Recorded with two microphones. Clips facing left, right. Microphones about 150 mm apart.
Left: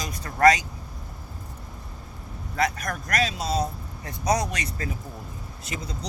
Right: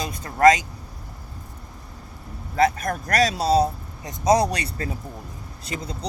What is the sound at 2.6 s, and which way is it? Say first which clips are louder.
Speech: right 6 dB; 25° right (ahead or behind).